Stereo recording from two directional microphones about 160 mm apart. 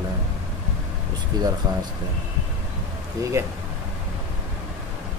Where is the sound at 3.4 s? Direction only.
20° right (ahead or behind).